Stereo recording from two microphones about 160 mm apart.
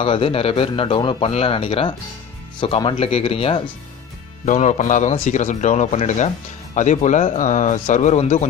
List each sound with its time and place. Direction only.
0.0 s speech: 35° left (ahead or behind)
4.5 s speech: 50° left (ahead or behind)